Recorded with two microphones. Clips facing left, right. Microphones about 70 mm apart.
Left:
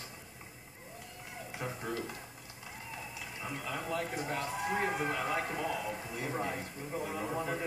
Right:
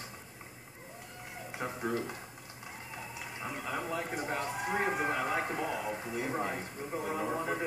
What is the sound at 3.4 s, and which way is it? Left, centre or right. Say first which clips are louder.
A man's voice: right 2 dB; right.